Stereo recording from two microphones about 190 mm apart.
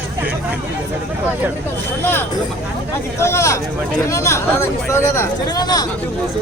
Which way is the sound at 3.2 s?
15° left (ahead or behind).